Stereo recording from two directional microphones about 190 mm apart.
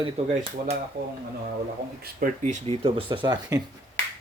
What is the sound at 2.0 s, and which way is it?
Speech, 45° right (ahead or behind).